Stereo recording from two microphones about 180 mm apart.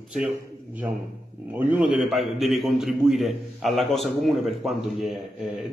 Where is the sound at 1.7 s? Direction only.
5° right (ahead or behind).